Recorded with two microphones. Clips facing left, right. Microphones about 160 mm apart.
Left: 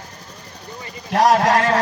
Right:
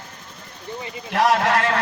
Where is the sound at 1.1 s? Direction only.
40° left (ahead or behind).